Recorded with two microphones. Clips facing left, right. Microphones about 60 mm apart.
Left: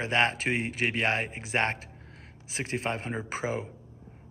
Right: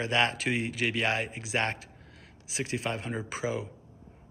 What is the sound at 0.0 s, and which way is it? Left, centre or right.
Speech, left.